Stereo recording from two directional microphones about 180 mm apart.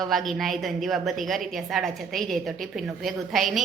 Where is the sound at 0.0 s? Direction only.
Centre (ahead or behind).